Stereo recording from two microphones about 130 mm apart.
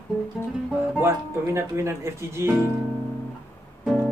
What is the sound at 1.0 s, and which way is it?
Speech, 20° right (ahead or behind).